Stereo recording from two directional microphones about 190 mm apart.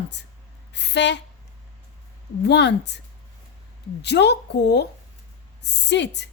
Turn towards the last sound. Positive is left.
turn(degrees=65)  # may be behind; listen again after turning